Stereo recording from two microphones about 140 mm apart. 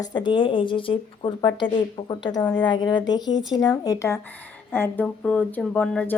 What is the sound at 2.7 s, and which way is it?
A woman's voice, 30° left (ahead or behind).